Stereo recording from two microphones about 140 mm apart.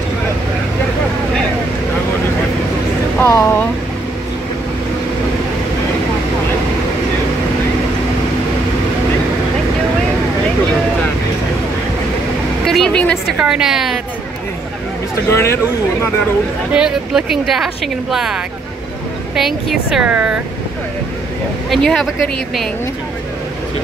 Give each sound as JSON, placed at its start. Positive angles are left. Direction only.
{"t": 3.2, "sound": "speech", "side_deg": 20}
{"t": 12.6, "sound": "vehicle", "side_deg": 5}
{"t": 13.4, "sound": "speech", "side_deg": -5}
{"t": 15.2, "sound": "a sound", "side_deg": 20}
{"t": 16.7, "sound": "speech", "side_deg": -5}
{"t": 21.6, "sound": "speech", "side_deg": 0}